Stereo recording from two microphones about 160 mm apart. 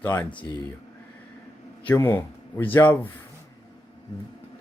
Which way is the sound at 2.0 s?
15° left (ahead or behind).